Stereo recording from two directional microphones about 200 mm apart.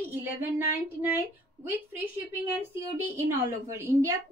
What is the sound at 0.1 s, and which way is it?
A woman's voice, 10° right (ahead or behind).